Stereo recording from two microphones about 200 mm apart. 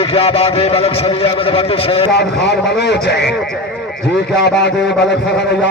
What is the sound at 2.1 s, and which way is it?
A man's voice, 60° left (ahead or behind).